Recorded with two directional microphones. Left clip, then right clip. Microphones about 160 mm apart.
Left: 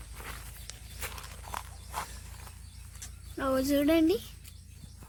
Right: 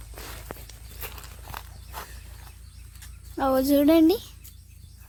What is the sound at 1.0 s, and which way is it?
Horse, 70° right (ahead or behind).